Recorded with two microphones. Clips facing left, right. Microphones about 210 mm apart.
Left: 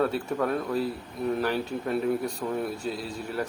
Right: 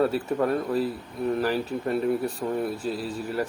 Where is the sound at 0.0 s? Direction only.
5° right (ahead or behind).